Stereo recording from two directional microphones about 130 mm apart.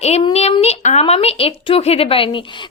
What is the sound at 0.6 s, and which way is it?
A woman's voice, 60° left (ahead or behind).